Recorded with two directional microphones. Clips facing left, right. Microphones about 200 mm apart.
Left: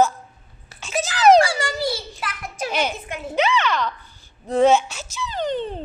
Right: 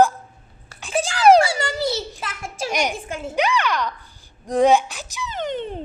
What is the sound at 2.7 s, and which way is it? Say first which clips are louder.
Speech: right 1 dB; 15° right (ahead or behind).